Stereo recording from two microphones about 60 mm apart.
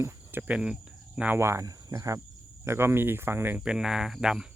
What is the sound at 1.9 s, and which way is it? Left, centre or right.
Cricket, right.